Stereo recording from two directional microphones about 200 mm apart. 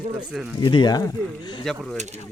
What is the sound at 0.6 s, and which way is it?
Speech, 25° left (ahead or behind).